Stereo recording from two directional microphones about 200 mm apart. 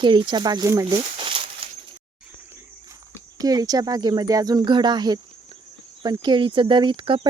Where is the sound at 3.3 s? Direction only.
20° right (ahead or behind).